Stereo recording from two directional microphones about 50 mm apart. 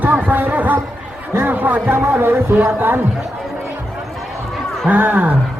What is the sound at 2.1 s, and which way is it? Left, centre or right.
Music, right.